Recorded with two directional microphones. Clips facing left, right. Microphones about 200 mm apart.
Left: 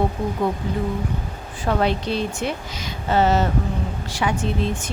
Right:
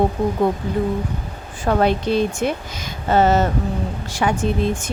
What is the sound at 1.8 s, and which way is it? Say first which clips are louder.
A woman's voice: right 6 dB; 50° right (ahead or behind).